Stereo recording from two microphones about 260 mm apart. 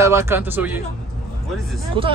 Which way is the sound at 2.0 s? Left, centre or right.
Centre.